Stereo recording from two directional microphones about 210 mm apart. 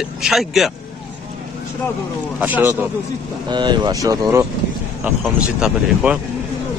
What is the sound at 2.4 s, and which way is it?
Speech, 10° right (ahead or behind).